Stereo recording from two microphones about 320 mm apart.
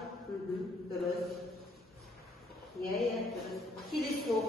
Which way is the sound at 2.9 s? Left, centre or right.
Centre.